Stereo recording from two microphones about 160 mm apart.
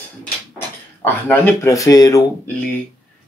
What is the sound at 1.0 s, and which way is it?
Speech, 10° left (ahead or behind).